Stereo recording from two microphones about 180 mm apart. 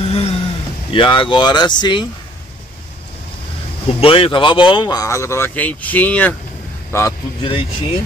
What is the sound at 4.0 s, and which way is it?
Speech, 30° left (ahead or behind).